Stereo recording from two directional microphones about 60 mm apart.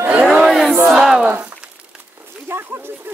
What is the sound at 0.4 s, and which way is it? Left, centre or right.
Crowd, centre.